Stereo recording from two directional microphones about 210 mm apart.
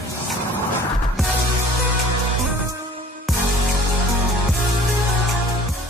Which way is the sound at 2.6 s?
20° right (ahead or behind).